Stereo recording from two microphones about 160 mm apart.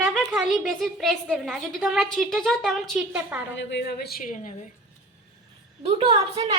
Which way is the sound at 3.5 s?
75° left (ahead or behind).